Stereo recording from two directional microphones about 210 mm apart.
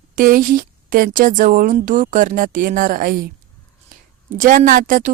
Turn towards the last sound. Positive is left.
turn(degrees=-40)  # may be behind; listen again after turning